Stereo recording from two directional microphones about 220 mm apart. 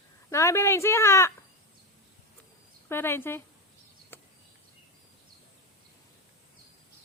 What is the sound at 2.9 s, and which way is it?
Speech, 10° left (ahead or behind).